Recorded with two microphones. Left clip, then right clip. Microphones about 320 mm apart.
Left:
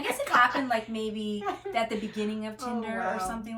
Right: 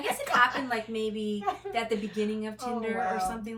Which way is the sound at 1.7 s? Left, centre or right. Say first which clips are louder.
Left 3 dB; centre.